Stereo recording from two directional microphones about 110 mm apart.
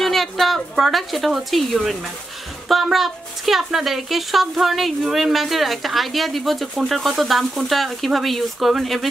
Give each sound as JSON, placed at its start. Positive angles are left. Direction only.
{"t": 0.0, "sound": "speech", "side_deg": 0}